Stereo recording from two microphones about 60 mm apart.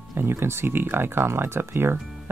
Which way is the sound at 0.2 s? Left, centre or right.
Right.